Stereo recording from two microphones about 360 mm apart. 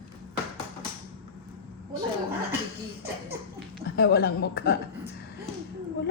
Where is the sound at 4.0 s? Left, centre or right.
Left.